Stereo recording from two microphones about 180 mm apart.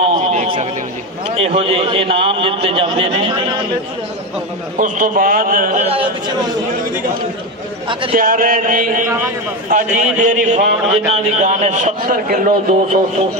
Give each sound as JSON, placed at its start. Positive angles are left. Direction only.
{"t": 0.0, "sound": "a man's voice", "side_deg": -35}
{"t": 4.7, "sound": "a man's voice", "side_deg": -45}
{"t": 5.9, "sound": "a man's voice", "side_deg": -30}
{"t": 8.1, "sound": "a man's voice", "side_deg": -50}